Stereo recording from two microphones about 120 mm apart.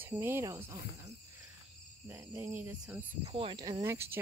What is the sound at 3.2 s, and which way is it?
Speech, 50° right (ahead or behind).